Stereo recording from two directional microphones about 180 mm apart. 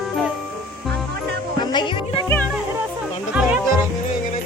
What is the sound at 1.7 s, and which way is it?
Music, 25° left (ahead or behind).